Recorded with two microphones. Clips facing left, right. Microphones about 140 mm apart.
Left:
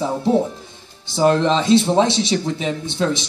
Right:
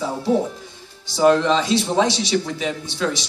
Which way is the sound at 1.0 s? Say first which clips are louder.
Even; 25° left (ahead or behind).